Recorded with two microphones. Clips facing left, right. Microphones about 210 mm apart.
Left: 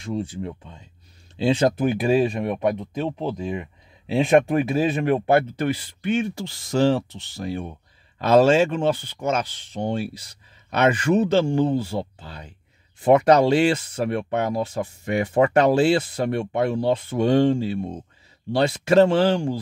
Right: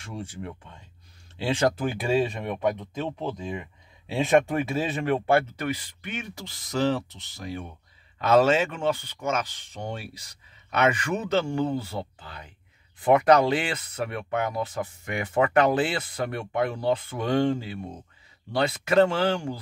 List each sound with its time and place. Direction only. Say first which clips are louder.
0.0 s speech: left 8 dB; 25° left (ahead or behind)